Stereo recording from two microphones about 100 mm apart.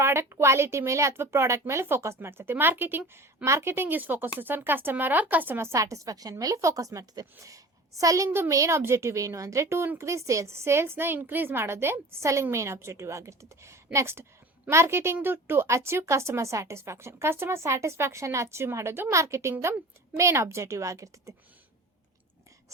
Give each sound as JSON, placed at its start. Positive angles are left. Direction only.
{"t": 0.0, "sound": "a woman's voice", "side_deg": -25}